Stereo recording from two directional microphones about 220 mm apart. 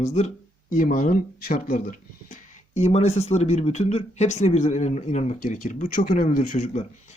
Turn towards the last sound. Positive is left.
turn(degrees=35)  # may be behind; listen again after turning